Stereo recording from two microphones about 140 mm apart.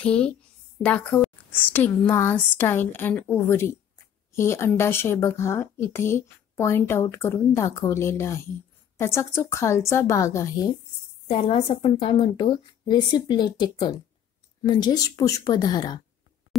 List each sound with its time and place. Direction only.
0.0 s a woman's voice: 5° left (ahead or behind)
11.2 s a woman's voice: 40° left (ahead or behind)